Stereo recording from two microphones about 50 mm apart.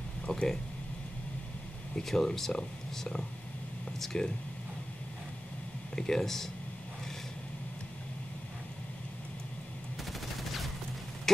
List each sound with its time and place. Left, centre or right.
0.3 s a sound: centre
2.0 s speech: centre
5.9 s speech: centre